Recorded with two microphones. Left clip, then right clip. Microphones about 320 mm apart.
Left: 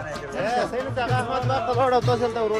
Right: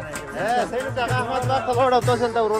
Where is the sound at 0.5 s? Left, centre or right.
Right.